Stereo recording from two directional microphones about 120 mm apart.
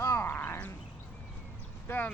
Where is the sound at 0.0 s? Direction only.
20° left (ahead or behind).